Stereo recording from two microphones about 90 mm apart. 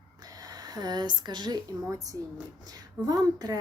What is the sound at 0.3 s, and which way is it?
A woman's voice, 45° right (ahead or behind).